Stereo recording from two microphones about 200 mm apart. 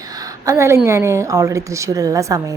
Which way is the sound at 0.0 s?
20° right (ahead or behind).